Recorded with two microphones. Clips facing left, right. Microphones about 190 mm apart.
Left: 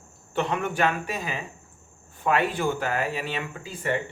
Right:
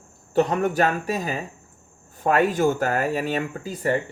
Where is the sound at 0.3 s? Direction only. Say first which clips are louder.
Right 6 dB; 40° right (ahead or behind).